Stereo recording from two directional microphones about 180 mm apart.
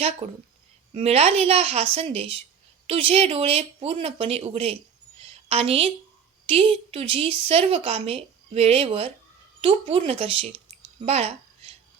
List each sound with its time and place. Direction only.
0.2 s a woman's voice: 35° right (ahead or behind)
5.2 s a sound: 35° right (ahead or behind)
6.4 s a woman's voice: 30° right (ahead or behind)